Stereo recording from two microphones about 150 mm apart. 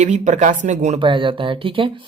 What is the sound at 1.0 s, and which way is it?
Speech, 35° right (ahead or behind).